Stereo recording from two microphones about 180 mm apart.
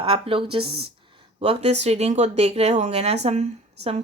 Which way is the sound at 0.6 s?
60° right (ahead or behind).